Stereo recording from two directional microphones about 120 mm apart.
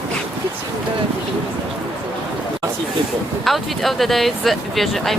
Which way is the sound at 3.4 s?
Centre (ahead or behind).